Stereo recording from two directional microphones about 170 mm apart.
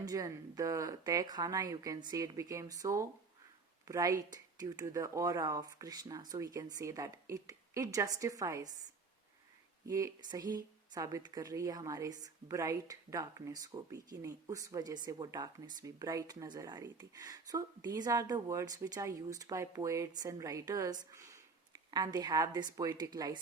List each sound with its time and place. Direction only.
0.0 s speech: 20° right (ahead or behind)
9.8 s speech: 20° right (ahead or behind)